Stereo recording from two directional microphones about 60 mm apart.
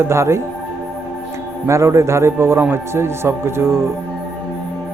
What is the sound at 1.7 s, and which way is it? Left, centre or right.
A man's voice, right.